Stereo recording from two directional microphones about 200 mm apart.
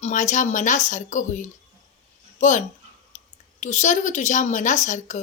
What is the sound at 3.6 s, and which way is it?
Speech, 35° left (ahead or behind).